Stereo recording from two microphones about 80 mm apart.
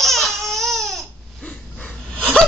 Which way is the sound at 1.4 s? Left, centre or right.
Centre.